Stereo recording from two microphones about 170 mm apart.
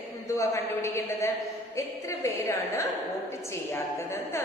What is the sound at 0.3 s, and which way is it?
A woman's voice, 20° left (ahead or behind).